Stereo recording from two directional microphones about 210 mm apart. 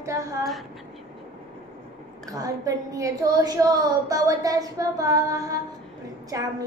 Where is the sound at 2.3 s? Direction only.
15° right (ahead or behind).